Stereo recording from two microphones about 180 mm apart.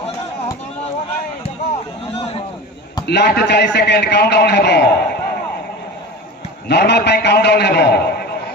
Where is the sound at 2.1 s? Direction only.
35° left (ahead or behind).